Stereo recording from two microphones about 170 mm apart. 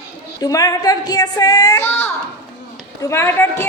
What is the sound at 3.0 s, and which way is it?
Speech, 15° left (ahead or behind).